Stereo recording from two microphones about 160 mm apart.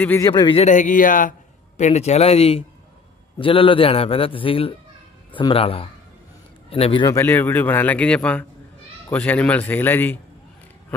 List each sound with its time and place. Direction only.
0.0 s speech: 15° left (ahead or behind)
0.3 s a man's voice: 30° left (ahead or behind)
0.7 s speech: 55° left (ahead or behind)
1.8 s a man's voice: 45° left (ahead or behind)
7.1 s speech: 15° left (ahead or behind)